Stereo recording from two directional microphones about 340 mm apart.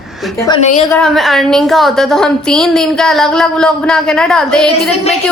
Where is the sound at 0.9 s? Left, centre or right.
Centre.